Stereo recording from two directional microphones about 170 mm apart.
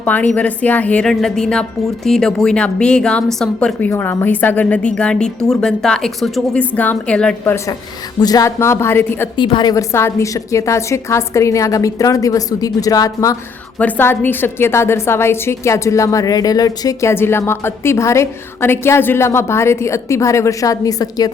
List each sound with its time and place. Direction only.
0.0 s a woman's voice: 10° left (ahead or behind)
8.2 s a woman's voice: 20° left (ahead or behind)
9.3 s a woman's voice: 25° left (ahead or behind)
13.7 s a woman's voice: 10° left (ahead or behind)